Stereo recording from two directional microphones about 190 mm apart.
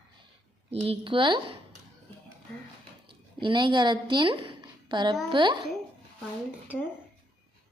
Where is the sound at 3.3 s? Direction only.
25° right (ahead or behind).